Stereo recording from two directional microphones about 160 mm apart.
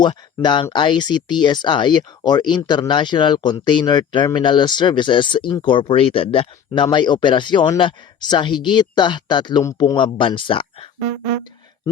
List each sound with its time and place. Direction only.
0.0 s speech: 30° left (ahead or behind)